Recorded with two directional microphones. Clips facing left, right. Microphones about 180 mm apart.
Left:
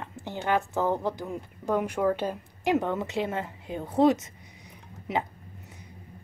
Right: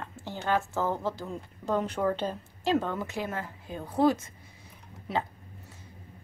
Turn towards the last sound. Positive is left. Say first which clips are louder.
# left 2 dB
turn(degrees=20)  # may be behind; listen again after turning